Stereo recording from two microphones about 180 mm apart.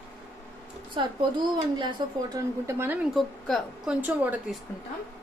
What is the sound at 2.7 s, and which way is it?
Speech, 15° right (ahead or behind).